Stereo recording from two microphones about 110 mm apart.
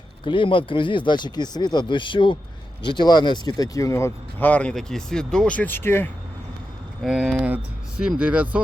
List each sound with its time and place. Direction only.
0.3 s speech: 50° left (ahead or behind); by 6.1 s 20° left (ahead or behind)
7.0 s speech: 5° right (ahead or behind)